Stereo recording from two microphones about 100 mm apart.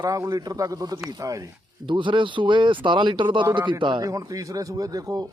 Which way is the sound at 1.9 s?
55° right (ahead or behind).